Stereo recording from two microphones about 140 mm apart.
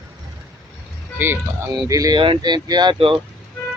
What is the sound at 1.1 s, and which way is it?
Speech, 15° right (ahead or behind).